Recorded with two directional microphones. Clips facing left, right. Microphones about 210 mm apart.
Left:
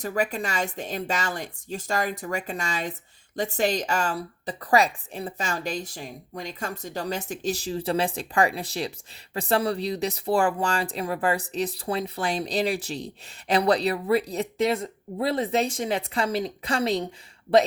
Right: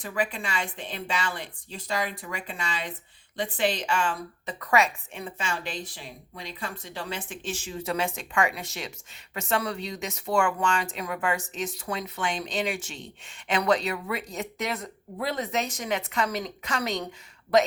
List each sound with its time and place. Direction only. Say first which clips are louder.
0.0 s speech: left 4 dB; 40° left (ahead or behind)